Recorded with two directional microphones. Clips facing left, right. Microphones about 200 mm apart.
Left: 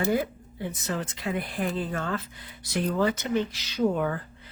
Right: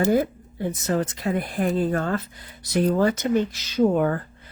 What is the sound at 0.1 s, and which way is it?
Speech, 45° right (ahead or behind).